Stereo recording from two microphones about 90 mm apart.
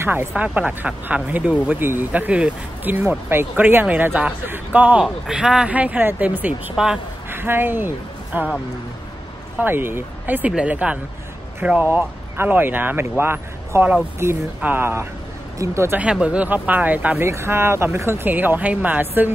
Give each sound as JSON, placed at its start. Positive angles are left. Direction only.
{"t": 0.0, "sound": "speech", "side_deg": -25}
{"t": 0.4, "sound": "speech", "side_deg": -15}
{"t": 6.8, "sound": "speech", "side_deg": -5}
{"t": 7.2, "sound": "speech", "side_deg": -25}
{"t": 9.6, "sound": "speech", "side_deg": -25}
{"t": 16.0, "sound": "speech", "side_deg": -15}